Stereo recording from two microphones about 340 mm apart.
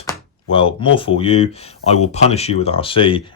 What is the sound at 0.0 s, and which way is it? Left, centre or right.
Speech, centre.